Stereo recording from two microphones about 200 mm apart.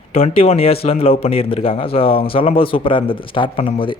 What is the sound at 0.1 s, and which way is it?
Speech, 30° left (ahead or behind).